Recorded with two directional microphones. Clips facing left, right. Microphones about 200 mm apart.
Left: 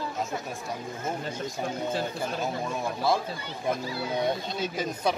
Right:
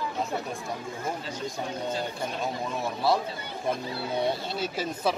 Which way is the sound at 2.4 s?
Centre (ahead or behind).